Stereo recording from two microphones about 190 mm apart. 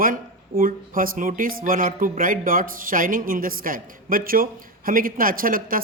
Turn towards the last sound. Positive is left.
turn(degrees=-45)  # may be behind; listen again after turning